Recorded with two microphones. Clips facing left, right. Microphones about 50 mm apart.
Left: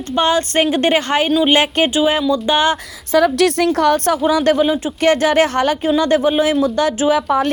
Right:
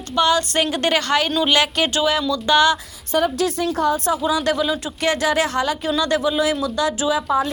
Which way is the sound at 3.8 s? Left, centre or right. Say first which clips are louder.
Left 5 dB; left.